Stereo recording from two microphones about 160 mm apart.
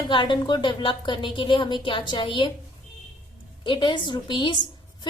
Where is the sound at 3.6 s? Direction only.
30° left (ahead or behind).